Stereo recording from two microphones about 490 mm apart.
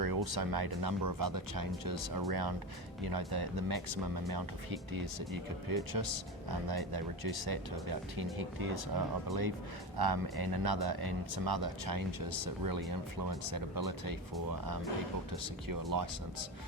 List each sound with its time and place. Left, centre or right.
0.0 s speech: right
15.6 s speech: right